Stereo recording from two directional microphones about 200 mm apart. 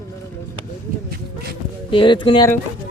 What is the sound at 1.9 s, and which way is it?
Speech, 25° left (ahead or behind).